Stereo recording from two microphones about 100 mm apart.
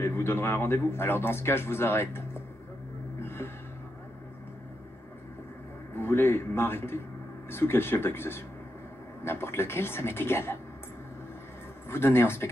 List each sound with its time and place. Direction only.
0.0 s speech: 25° left (ahead or behind)
3.2 s gasp: 25° left (ahead or behind)
5.9 s speech: 20° left (ahead or behind)
11.9 s speech: 25° left (ahead or behind)